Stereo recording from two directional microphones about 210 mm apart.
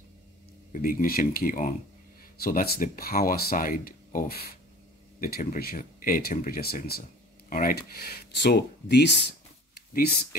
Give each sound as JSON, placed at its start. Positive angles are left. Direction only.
{"t": 0.7, "sound": "speech", "side_deg": 40}